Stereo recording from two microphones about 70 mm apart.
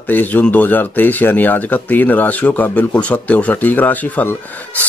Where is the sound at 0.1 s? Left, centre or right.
Left.